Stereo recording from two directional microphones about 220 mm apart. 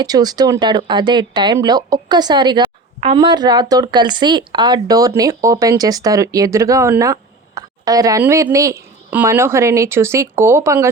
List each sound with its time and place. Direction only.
0.0 s speech: 15° right (ahead or behind)